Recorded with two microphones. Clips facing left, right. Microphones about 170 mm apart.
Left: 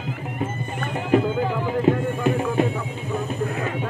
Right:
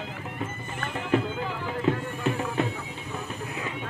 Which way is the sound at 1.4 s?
50° left (ahead or behind).